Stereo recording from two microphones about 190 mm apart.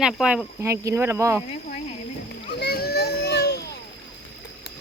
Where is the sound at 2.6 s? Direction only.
55° left (ahead or behind).